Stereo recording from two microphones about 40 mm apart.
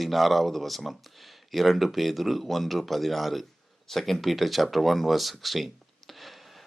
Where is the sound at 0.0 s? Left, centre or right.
Centre.